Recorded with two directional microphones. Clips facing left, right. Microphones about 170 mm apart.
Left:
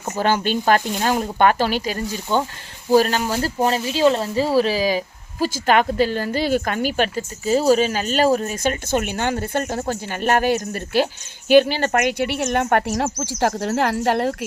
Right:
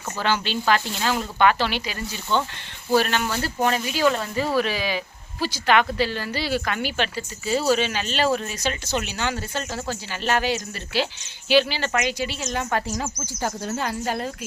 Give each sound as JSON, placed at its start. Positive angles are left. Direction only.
{"t": 0.2, "sound": "speech", "side_deg": 45}